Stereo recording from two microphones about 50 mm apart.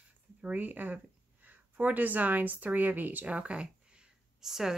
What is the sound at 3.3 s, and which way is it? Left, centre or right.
Speech, right.